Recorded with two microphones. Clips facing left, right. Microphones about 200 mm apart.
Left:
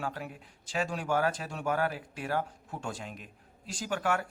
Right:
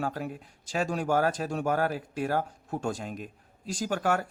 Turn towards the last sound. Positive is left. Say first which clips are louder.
# right 3 dB
turn(degrees=-40)  # may be behind; listen again after turning